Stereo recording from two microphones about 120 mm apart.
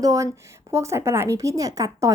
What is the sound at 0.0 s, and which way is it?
A woman's voice, 25° right (ahead or behind).